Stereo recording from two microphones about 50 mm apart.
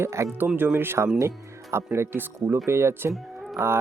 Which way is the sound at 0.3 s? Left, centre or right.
Right.